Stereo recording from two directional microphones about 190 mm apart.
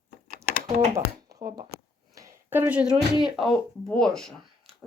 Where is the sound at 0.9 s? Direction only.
15° right (ahead or behind).